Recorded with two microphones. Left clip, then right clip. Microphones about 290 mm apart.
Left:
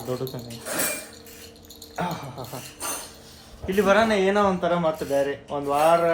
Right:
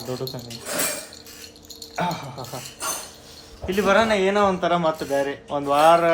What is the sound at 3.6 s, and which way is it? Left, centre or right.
Speech, centre.